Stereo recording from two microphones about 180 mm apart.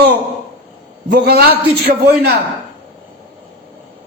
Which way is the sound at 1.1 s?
60° right (ahead or behind).